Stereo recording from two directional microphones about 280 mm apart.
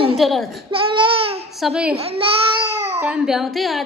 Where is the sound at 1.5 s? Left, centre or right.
Centre.